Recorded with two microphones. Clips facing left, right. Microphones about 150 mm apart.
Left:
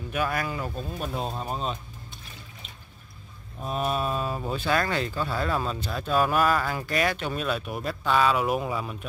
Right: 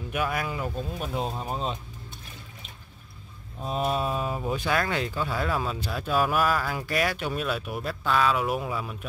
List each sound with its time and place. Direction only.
0.1 s speech: 10° right (ahead or behind)
3.7 s speech: 25° right (ahead or behind); by 8.9 s centre (ahead or behind)